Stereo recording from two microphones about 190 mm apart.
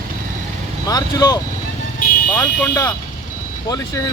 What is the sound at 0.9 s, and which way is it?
Speech, 20° left (ahead or behind).